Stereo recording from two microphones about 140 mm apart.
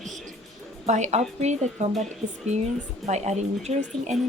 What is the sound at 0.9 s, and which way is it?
Speech, 55° right (ahead or behind).